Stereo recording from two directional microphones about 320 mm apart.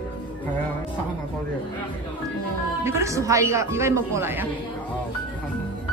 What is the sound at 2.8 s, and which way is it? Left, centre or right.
A man's voice, centre.